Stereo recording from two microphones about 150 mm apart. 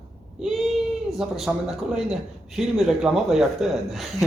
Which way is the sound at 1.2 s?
Centre (ahead or behind).